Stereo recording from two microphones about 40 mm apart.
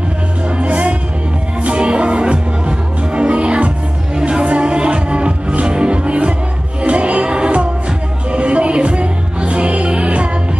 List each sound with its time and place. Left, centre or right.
0.6 s music: right